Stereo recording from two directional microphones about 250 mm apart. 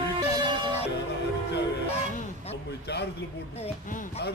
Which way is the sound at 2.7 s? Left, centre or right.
Left.